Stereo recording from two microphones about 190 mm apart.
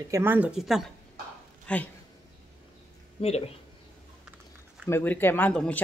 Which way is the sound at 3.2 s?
35° left (ahead or behind).